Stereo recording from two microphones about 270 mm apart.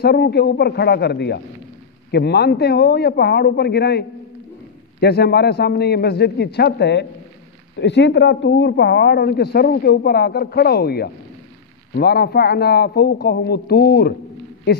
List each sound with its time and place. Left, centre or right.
0.0 s speech: left
5.0 s speech: left